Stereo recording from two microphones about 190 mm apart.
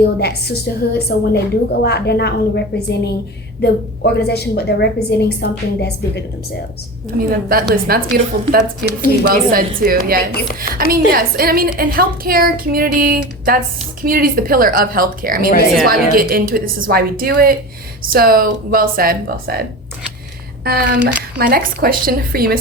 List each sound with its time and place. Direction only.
0.0 s a woman's voice: 60° left (ahead or behind)
7.2 s speech: 50° right (ahead or behind)
20.7 s speech: 55° right (ahead or behind)